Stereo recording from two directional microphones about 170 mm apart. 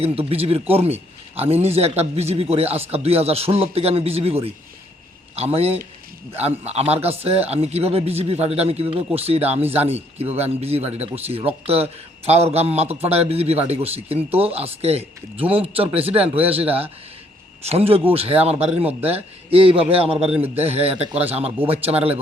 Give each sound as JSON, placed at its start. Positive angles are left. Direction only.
{"t": 0.0, "sound": "speech", "side_deg": -35}
{"t": 18.9, "sound": "a man's voice", "side_deg": -10}
{"t": 19.1, "sound": "speech", "side_deg": -35}